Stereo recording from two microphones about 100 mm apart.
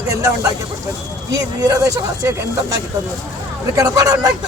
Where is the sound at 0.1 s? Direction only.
35° right (ahead or behind).